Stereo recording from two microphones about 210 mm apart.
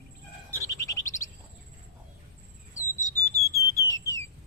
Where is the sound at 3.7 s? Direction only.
15° left (ahead or behind).